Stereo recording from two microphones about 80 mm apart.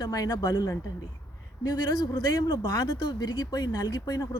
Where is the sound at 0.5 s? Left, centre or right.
Left.